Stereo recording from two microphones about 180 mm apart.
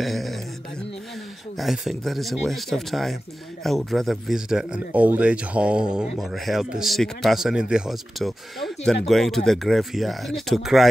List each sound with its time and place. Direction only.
0.0 s speech: centre (ahead or behind)
1.6 s speech: centre (ahead or behind)